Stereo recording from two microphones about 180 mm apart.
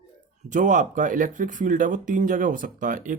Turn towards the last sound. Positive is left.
turn(degrees=-45)  # may be behind; listen again after turning